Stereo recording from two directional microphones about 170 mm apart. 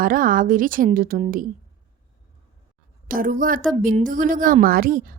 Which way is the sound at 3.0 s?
55° right (ahead or behind).